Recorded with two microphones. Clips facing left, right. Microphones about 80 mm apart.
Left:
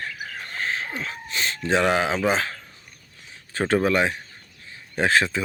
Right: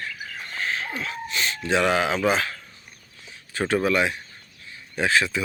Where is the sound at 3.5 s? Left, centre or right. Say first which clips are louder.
Left 1 dB; left.